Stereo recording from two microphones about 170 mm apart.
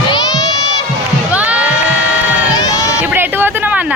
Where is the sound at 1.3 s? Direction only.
10° right (ahead or behind).